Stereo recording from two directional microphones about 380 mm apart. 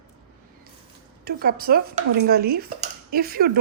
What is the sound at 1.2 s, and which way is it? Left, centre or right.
Speech, right.